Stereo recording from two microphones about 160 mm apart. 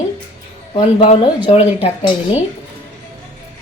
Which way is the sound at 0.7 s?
40° left (ahead or behind).